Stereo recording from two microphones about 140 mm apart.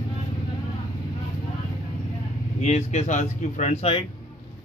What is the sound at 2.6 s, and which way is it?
Speech, 55° left (ahead or behind).